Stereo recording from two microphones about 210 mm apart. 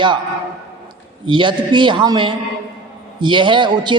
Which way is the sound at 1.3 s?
20° right (ahead or behind).